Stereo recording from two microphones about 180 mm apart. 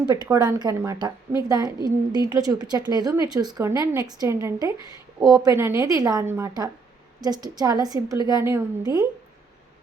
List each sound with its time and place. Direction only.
0.1 s a woman's voice: 20° right (ahead or behind)